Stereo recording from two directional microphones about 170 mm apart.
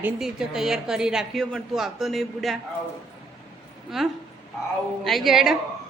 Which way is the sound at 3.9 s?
Centre (ahead or behind).